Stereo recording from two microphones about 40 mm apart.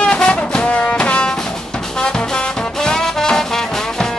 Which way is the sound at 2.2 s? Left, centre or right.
Left.